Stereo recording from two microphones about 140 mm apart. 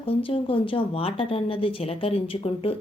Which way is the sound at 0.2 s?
40° left (ahead or behind).